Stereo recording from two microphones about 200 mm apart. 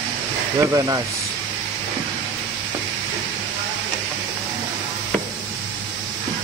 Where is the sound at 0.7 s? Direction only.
20° right (ahead or behind).